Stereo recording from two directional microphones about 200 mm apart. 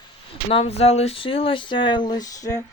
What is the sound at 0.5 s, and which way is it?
Speech, 30° left (ahead or behind).